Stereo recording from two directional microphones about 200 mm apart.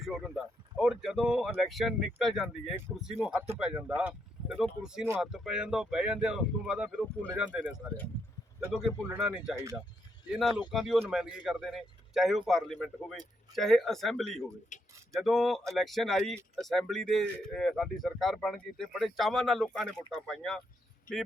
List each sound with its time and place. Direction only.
0.0 s speech: centre (ahead or behind)
10.7 s speech: centre (ahead or behind)
14.7 s speech: 35° left (ahead or behind)
15.1 s speech: centre (ahead or behind)
21.1 s speech: 45° left (ahead or behind)